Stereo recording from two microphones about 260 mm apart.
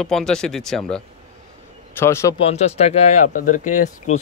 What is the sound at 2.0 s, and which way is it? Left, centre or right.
Speech, centre.